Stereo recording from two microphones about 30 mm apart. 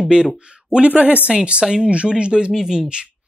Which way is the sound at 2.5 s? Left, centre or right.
Centre.